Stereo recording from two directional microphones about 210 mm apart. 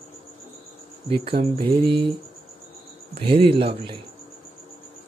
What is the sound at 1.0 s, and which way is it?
Speech, 25° right (ahead or behind).